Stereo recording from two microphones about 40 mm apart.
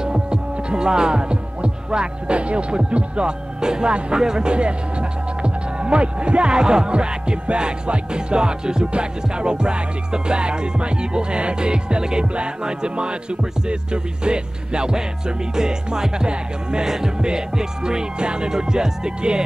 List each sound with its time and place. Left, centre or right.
0.0 s music: right